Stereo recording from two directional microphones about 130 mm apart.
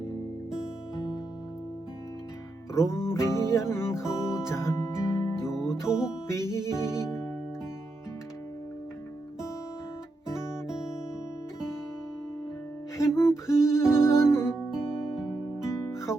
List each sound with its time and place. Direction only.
2.7 s music: 20° left (ahead or behind)
10.7 s music: 5° right (ahead or behind)
13.0 s music: 20° left (ahead or behind)
14.5 s music: 5° right (ahead or behind)
15.5 s music: 20° left (ahead or behind)